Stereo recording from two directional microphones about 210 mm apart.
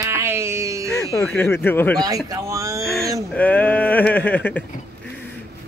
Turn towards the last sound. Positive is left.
turn(degrees=10)  # may be behind; listen again after turning